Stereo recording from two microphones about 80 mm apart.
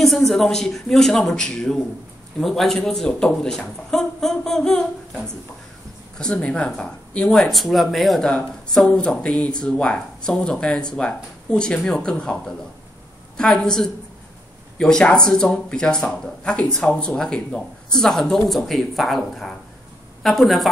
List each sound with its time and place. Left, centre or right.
0.0 s speech: centre